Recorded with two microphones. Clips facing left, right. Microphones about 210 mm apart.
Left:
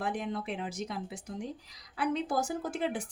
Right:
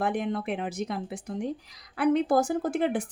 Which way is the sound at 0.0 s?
55° right (ahead or behind).